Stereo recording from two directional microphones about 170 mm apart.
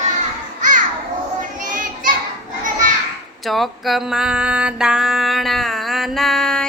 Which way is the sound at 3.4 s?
Centre (ahead or behind).